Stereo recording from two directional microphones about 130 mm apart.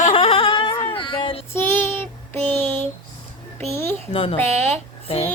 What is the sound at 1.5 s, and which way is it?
Child singing, 20° left (ahead or behind).